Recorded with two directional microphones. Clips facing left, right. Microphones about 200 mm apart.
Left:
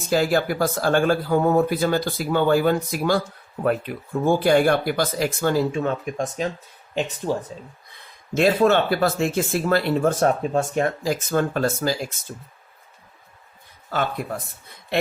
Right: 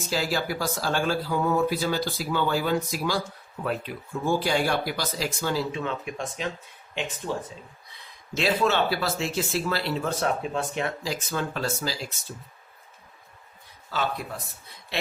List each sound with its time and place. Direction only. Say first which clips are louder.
0.1 s speech: left 8 dB; 55° left (ahead or behind)
7.2 s speech: left 6 dB; 30° left (ahead or behind)
8.4 s speech: left 6 dB; 50° left (ahead or behind)
13.9 s speech: left 4 dB; 55° left (ahead or behind)